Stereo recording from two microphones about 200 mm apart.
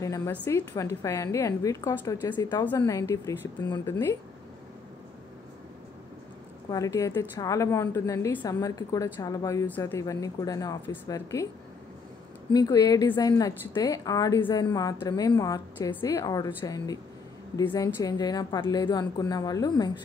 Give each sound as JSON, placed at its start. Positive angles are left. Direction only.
{"t": 0.0, "sound": "a woman's voice", "side_deg": 15}
{"t": 6.7, "sound": "a woman's voice", "side_deg": 15}
{"t": 12.5, "sound": "a woman's voice", "side_deg": 20}